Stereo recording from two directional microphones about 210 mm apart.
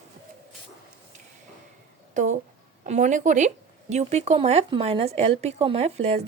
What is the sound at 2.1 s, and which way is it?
A woman's voice, 35° right (ahead or behind).